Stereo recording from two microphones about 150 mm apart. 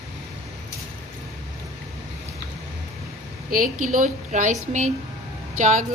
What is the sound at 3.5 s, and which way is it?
A woman's voice, 65° right (ahead or behind).